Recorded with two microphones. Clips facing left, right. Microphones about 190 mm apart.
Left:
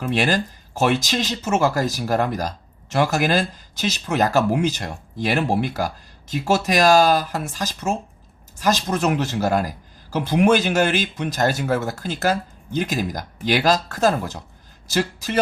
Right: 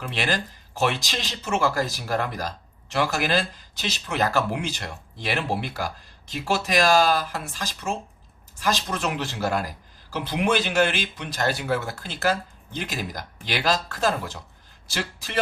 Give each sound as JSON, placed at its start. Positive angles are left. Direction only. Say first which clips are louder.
{"t": 0.0, "sound": "a man's voice", "louder": "left 7 dB", "side_deg": 45}